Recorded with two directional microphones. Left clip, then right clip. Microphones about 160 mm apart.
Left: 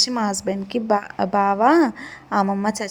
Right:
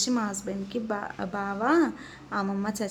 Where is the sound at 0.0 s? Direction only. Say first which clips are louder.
Left 8 dB; 35° left (ahead or behind).